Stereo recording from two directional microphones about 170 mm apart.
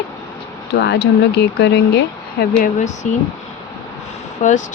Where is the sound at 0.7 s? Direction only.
80° left.